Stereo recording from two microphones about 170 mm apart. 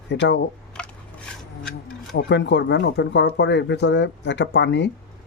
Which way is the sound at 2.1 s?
90° left.